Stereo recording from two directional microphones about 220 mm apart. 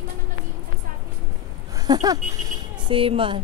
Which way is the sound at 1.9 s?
15° right (ahead or behind).